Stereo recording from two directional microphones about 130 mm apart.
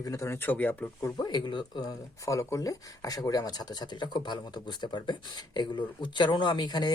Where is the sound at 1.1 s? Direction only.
35° left (ahead or behind).